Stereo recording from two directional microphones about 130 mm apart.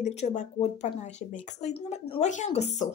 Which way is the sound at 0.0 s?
60° left (ahead or behind).